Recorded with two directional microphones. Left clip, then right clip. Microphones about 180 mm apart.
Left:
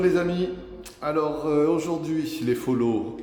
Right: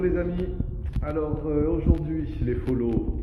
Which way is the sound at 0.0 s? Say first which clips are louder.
Left 4 dB; 25° left (ahead or behind).